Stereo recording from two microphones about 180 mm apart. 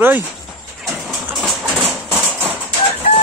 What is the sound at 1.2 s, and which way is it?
Clip-clop, 5° right (ahead or behind).